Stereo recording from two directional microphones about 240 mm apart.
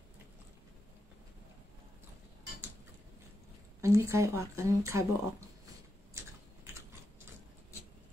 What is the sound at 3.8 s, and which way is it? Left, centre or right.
A woman's voice, centre.